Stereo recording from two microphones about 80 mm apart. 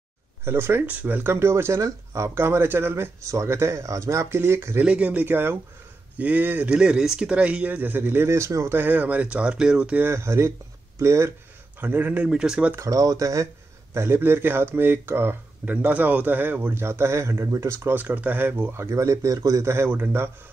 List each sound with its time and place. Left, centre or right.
0.5 s speech: right
4.8 s speech: centre
6.7 s speech: centre; by 8.7 s right
8.7 s speech: right
10.0 s speech: right
11.8 s speech: right
12.3 s speech: centre
12.7 s speech: right
13.9 s speech: right
18.0 s speech: right
18.8 s speech: right